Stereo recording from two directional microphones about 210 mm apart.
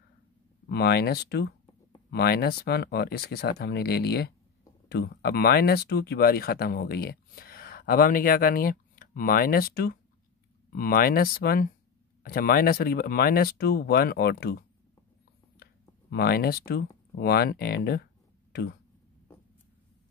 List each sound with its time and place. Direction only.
0.7 s speech: 50° left (ahead or behind)
16.1 s speech: 50° left (ahead or behind)